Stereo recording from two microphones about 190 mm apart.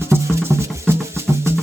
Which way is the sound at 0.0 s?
10° right (ahead or behind).